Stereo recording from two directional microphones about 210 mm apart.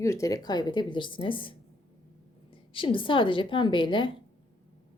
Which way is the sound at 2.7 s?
25° left (ahead or behind).